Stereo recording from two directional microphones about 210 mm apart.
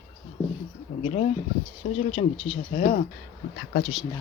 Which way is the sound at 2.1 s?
25° left (ahead or behind).